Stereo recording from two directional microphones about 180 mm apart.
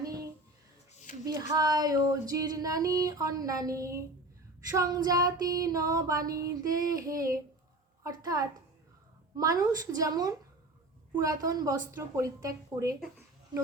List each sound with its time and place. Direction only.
0.0 s a sound: 20° right (ahead or behind)
1.2 s female singing: 20° right (ahead or behind)
11.1 s a woman's voice: 20° right (ahead or behind)